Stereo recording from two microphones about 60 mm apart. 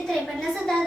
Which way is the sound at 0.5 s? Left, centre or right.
Centre.